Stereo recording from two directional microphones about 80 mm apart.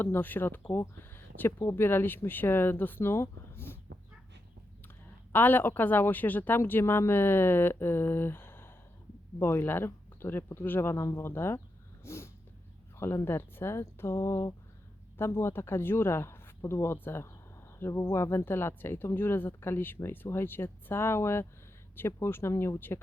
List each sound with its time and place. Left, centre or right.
0.0 s speech: left
5.3 s speech: left